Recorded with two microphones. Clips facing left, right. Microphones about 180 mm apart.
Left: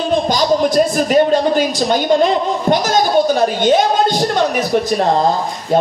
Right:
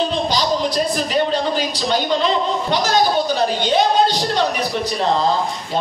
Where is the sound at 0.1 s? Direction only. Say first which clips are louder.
Left 5 dB; 50° left (ahead or behind).